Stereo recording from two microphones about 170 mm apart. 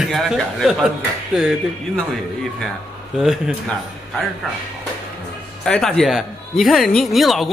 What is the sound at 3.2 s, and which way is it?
Speech, centre (ahead or behind).